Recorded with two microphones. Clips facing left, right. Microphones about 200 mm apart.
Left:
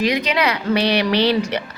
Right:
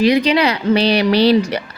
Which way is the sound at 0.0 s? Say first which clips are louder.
Right 6 dB; 30° right (ahead or behind).